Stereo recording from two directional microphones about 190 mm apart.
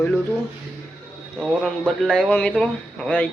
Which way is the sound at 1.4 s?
Centre (ahead or behind).